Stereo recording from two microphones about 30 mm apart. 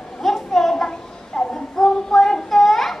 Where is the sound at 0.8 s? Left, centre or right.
Left.